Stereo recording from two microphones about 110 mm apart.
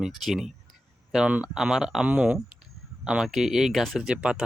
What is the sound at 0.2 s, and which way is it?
Speech, centre (ahead or behind).